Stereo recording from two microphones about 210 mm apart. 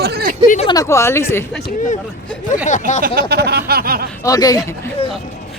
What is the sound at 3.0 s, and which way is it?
A man's voice, 45° right (ahead or behind).